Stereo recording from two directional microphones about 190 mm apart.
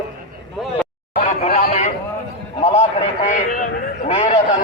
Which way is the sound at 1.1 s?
40° left (ahead or behind).